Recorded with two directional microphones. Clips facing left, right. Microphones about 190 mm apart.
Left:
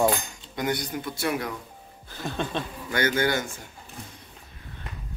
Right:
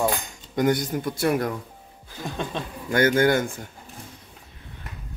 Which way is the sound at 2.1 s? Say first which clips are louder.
Left 1 dB; 10° right (ahead or behind).